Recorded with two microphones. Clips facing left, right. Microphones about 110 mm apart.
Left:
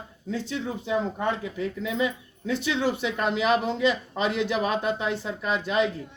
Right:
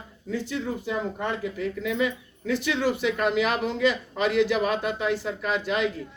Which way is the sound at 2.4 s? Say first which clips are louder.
Right 1 dB; 30° left (ahead or behind).